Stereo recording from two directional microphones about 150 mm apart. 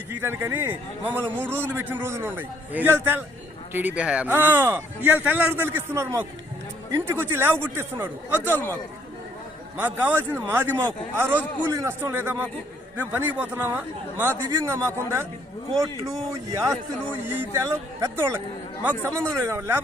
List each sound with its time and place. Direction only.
0.2 s speech: 15° right (ahead or behind)
9.7 s speech: 10° right (ahead or behind)
16.3 s speech: 20° right (ahead or behind)